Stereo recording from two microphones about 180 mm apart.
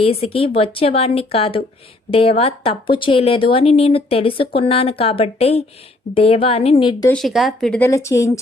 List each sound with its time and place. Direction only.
0.0 s a woman's voice: 30° left (ahead or behind)
7.1 s speech: centre (ahead or behind)
7.9 s speech: 15° left (ahead or behind)